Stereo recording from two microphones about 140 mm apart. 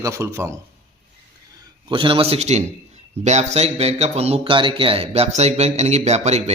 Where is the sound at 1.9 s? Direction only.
35° right (ahead or behind).